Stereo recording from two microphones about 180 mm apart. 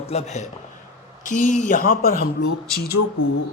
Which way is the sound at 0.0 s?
35° left (ahead or behind).